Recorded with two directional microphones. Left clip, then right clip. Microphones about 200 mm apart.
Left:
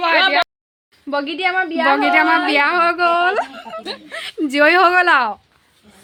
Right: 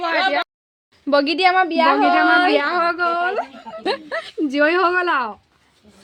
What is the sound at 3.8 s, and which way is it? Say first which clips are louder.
Speech: right 6 dB; 45° right (ahead or behind).